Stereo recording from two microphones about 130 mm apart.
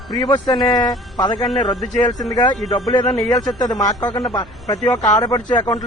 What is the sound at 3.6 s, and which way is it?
Speech, 30° left (ahead or behind).